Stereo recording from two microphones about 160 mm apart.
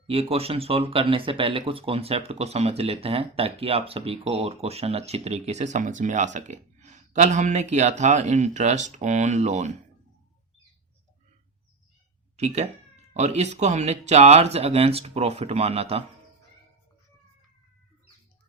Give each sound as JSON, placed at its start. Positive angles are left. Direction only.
{"t": 0.1, "sound": "speech", "side_deg": -40}
{"t": 12.4, "sound": "speech", "side_deg": -45}